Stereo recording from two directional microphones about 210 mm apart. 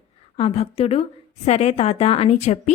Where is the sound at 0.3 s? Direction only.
30° left (ahead or behind).